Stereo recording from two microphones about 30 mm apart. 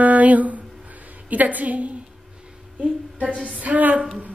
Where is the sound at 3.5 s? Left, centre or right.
Right.